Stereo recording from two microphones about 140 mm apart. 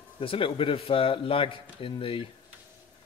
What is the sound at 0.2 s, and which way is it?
Speech, 40° left (ahead or behind).